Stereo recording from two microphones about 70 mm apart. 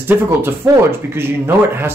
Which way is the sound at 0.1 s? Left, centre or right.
Right.